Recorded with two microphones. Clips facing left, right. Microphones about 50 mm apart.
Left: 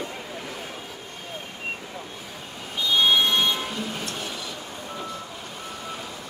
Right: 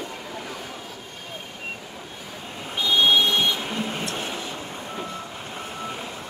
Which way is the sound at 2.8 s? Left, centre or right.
Right.